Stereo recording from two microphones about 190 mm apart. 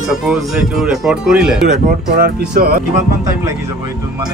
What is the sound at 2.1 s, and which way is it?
Speech, 55° right (ahead or behind).